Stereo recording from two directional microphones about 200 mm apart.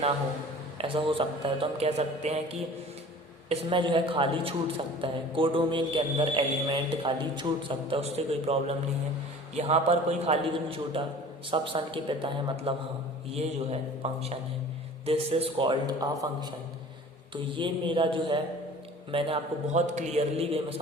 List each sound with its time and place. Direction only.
0.8 s a man's voice: 25° right (ahead or behind)